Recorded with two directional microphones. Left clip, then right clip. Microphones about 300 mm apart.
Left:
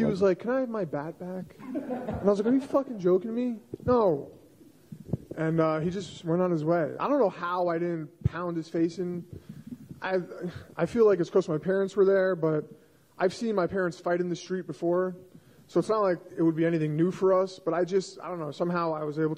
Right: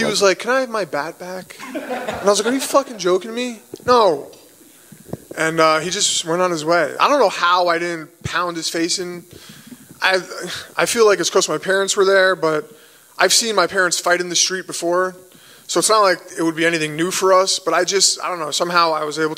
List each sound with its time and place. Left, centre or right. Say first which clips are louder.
0.0 s a man's voice: right 9 dB; centre
5.1 s a man's voice: right 10 dB; centre
14.9 s a man's voice: right 9 dB; centre